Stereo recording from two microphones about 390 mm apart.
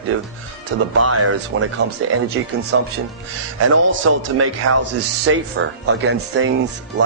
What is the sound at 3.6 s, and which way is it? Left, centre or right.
A man's voice, right.